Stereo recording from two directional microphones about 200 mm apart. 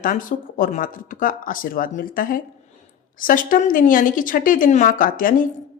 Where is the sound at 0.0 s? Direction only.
40° left (ahead or behind).